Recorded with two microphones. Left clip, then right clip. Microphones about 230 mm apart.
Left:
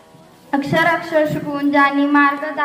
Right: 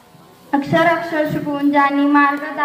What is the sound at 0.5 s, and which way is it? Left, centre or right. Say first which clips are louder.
A man's voice: right 1 dB; left.